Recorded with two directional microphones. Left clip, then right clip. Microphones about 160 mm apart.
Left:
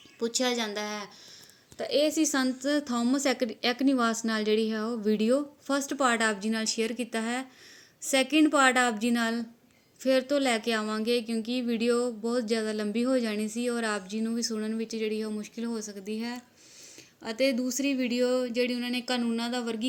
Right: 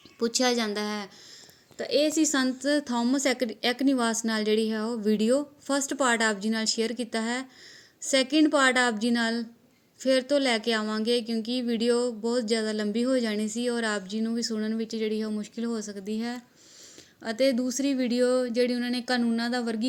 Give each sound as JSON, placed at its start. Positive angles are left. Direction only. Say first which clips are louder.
{"t": 0.2, "sound": "speech", "louder": "right 3 dB", "side_deg": -45}
{"t": 1.8, "sound": "speech", "louder": "right 1 dB", "side_deg": -30}